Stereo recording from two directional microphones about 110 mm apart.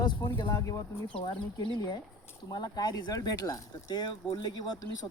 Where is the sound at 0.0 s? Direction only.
45° left (ahead or behind).